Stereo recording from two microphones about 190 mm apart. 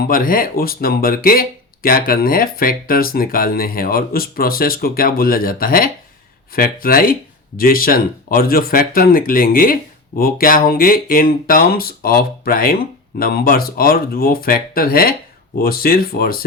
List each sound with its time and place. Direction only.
0.1 s speech: 50° left (ahead or behind)